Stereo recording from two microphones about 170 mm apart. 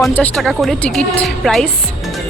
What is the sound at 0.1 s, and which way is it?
Speech, 10° left (ahead or behind).